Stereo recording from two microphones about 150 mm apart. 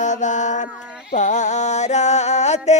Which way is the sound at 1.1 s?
55° left (ahead or behind).